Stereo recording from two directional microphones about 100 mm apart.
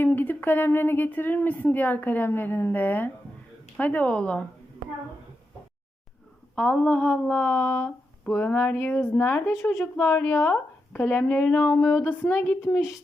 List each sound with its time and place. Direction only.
0.0 s speech: 20° left (ahead or behind)
6.6 s speech: 10° left (ahead or behind)
11.8 s speech: 25° left (ahead or behind)